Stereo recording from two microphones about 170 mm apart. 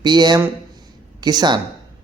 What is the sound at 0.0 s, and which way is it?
Speech, 25° right (ahead or behind).